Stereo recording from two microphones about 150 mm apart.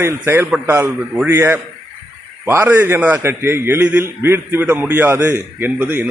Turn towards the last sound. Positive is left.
turn(degrees=-15)  # may be behind; listen again after turning